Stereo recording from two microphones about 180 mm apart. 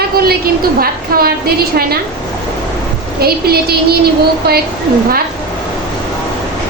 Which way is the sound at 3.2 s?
60° right (ahead or behind).